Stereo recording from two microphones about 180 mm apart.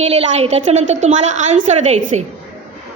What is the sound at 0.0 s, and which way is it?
A woman's voice, 35° right (ahead or behind).